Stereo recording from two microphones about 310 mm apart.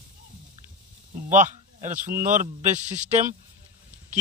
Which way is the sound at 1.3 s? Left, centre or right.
Right.